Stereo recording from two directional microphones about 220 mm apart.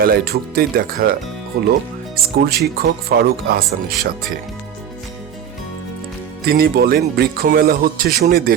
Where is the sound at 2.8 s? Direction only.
45° right (ahead or behind).